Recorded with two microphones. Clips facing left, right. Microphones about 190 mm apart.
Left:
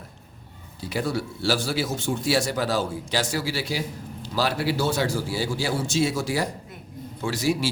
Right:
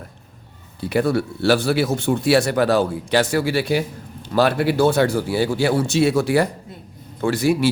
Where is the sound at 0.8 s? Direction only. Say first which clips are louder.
Right 8 dB; 60° right (ahead or behind).